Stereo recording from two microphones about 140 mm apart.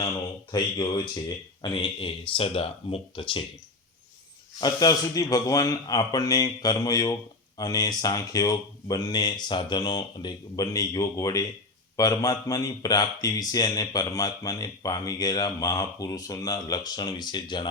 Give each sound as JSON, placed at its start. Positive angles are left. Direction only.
{"t": 0.5, "sound": "speech", "side_deg": 30}
{"t": 4.6, "sound": "speech", "side_deg": 25}